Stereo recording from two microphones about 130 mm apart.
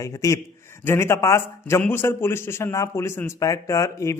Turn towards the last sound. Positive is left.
turn(degrees=25)  # may be behind; listen again after turning